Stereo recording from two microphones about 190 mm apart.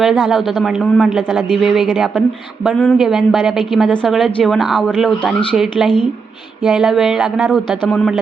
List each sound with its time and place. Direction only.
0.0 s a woman's voice: centre (ahead or behind)